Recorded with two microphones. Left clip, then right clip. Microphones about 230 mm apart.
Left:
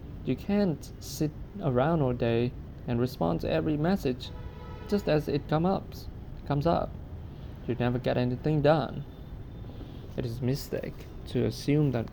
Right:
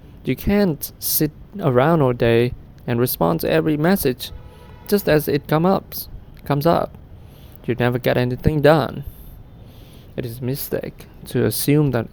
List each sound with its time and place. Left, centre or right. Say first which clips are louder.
0.3 s speech: right 10 dB; right
10.2 s speech: right 6 dB; right